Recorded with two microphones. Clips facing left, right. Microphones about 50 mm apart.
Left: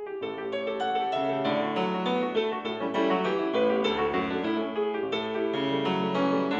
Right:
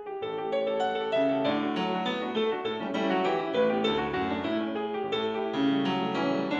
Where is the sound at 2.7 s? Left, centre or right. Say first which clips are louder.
Left 2 dB; centre.